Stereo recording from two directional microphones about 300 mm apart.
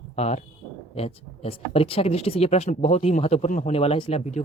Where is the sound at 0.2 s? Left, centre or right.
Left.